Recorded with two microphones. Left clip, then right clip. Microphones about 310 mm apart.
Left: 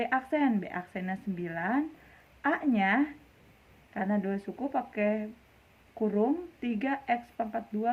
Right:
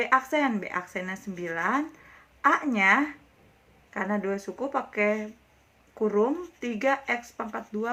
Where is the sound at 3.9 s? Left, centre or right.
Left.